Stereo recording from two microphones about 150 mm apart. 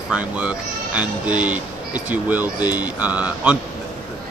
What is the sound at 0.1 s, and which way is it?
Speech, 5° right (ahead or behind).